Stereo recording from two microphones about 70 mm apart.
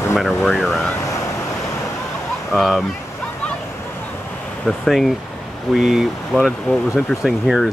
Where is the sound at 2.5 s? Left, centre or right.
Centre.